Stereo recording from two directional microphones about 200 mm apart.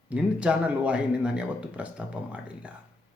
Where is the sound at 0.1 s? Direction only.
5° right (ahead or behind).